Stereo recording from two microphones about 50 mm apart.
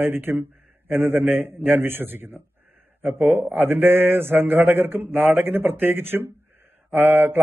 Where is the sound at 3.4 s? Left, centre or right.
Right.